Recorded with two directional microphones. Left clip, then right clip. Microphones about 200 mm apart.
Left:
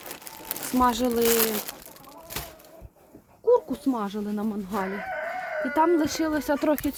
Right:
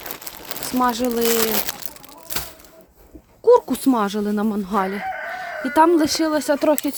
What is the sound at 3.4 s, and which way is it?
Speech, 40° right (ahead or behind).